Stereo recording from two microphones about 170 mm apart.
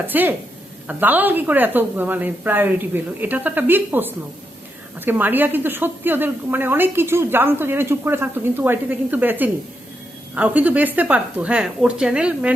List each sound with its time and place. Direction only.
0.1 s a woman's voice: 10° right (ahead or behind)